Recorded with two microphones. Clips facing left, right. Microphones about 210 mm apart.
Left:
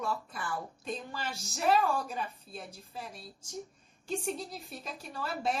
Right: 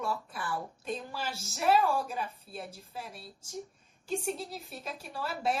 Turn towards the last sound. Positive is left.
turn(degrees=0)  # may be behind; listen again after turning